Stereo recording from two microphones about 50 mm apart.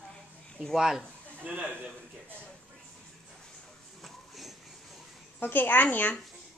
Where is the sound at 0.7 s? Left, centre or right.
Centre.